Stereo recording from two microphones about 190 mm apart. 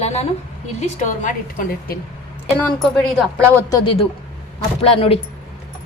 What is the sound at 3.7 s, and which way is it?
A man's voice, 25° left (ahead or behind).